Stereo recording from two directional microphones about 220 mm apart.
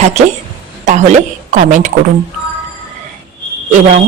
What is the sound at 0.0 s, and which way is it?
A woman's voice, 30° right (ahead or behind).